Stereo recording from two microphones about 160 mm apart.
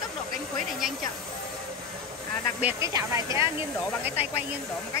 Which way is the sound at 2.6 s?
20° right (ahead or behind).